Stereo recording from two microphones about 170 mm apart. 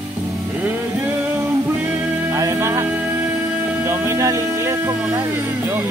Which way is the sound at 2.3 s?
20° right (ahead or behind).